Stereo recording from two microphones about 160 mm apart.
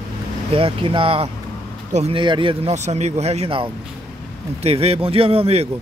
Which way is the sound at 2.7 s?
45° right (ahead or behind).